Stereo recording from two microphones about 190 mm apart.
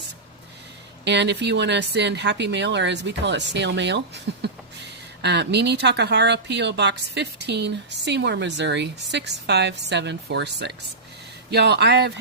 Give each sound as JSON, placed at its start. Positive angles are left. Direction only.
{"t": 1.0, "sound": "speech", "side_deg": -65}